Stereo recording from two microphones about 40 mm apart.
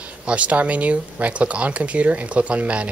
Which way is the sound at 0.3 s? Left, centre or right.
Right.